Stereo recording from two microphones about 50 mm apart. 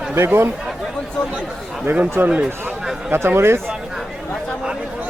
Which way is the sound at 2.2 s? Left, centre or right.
Right.